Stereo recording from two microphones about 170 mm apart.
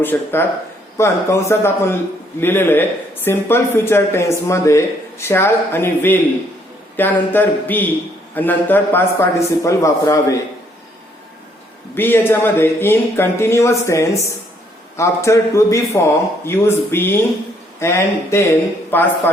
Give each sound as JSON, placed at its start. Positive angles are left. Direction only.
{"t": 0.0, "sound": "speech", "side_deg": 15}
{"t": 11.9, "sound": "speech", "side_deg": 10}